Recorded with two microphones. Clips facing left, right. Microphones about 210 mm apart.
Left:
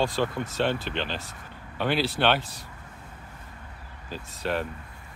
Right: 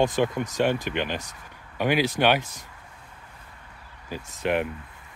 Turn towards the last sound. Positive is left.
turn(degrees=-20)  # may be behind; listen again after turning